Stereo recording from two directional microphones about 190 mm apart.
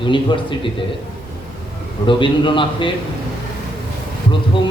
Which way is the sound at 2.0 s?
25° left (ahead or behind).